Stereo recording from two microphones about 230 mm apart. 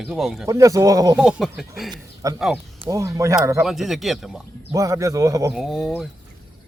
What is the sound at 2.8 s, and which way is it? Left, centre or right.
Speech, centre.